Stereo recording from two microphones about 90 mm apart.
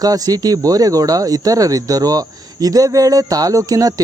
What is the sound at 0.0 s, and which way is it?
Speech, 45° right (ahead or behind).